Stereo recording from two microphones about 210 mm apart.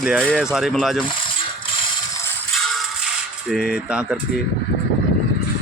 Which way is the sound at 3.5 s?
Centre (ahead or behind).